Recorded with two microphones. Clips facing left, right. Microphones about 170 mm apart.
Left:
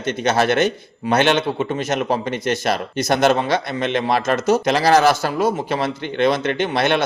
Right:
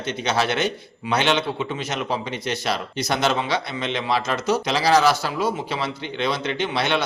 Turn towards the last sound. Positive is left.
turn(degrees=50)  # may be behind; listen again after turning